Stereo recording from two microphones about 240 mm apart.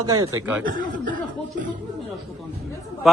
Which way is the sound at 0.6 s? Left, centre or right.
Right.